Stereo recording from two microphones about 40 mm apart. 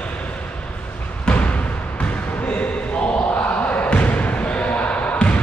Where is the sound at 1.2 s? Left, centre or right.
Left.